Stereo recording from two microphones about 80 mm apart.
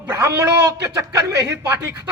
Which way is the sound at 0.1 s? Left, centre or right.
Right.